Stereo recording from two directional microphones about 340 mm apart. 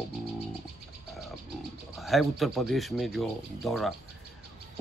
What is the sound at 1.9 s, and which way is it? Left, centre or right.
Speech, centre.